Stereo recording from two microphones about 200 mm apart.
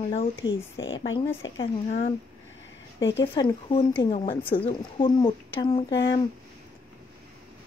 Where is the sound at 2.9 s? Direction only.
65° left (ahead or behind).